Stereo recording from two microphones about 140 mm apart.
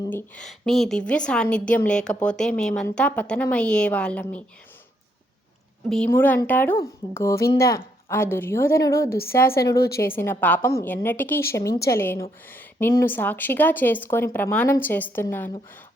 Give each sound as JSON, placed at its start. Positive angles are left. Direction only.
{"t": 0.1, "sound": "a woman's voice", "side_deg": 15}
{"t": 0.4, "sound": "a woman's voice", "side_deg": 0}
{"t": 6.1, "sound": "a woman's voice", "side_deg": 15}
{"t": 12.5, "sound": "a sound", "side_deg": 15}
{"t": 12.9, "sound": "a woman's voice", "side_deg": 15}